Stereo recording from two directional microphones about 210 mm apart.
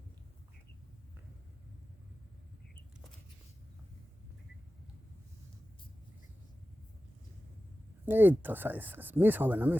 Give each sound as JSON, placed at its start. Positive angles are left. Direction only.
{"t": 8.0, "sound": "speech", "side_deg": -10}